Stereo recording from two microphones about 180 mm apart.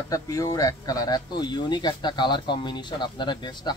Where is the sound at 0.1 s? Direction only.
20° left (ahead or behind).